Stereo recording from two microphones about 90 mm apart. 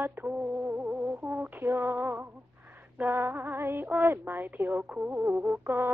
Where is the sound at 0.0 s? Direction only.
20° right (ahead or behind).